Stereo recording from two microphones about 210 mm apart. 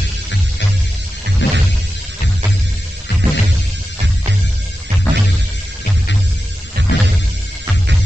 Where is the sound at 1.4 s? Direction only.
55° left (ahead or behind).